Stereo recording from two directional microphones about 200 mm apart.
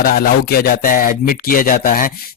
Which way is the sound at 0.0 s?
45° left (ahead or behind).